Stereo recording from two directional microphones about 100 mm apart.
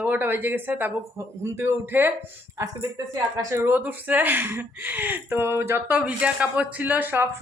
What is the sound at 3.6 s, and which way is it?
Speech, 15° right (ahead or behind).